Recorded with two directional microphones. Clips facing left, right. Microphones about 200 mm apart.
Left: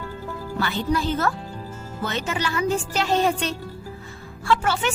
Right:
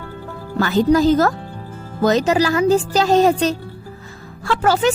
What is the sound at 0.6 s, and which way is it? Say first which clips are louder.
Speech: right 10 dB; 40° right (ahead or behind).